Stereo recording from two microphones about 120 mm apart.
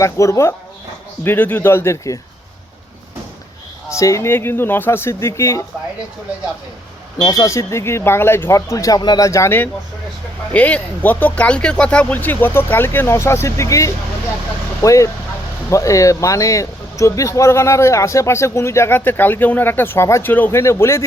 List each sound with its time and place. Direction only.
0.0 s speech: 25° left (ahead or behind)
3.8 s speech: 25° left (ahead or behind)
7.2 s speech: 30° left (ahead or behind)